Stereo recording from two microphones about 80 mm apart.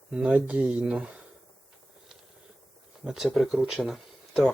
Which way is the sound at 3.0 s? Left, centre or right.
Centre.